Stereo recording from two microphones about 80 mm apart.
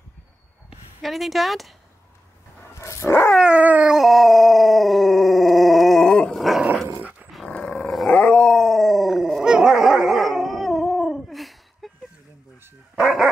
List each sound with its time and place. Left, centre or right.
1.0 s speech: centre
2.7 s dog: left
3.3 s dog: centre
3.9 s howl: centre
7.0 s dog: centre
7.4 s dog: centre